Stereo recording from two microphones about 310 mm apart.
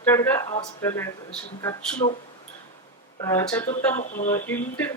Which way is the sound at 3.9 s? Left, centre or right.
Left.